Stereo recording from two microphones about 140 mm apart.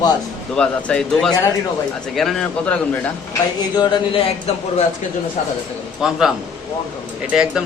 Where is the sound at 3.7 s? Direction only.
30° left (ahead or behind).